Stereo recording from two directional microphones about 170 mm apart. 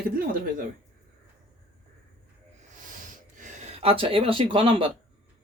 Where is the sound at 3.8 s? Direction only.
35° right (ahead or behind).